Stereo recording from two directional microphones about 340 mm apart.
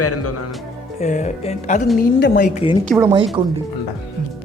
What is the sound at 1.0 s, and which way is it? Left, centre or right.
Speech, centre.